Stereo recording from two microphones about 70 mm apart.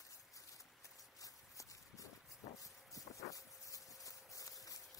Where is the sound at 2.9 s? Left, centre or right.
Left.